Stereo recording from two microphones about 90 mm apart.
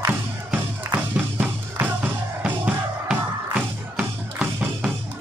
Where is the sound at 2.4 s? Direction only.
15° right (ahead or behind).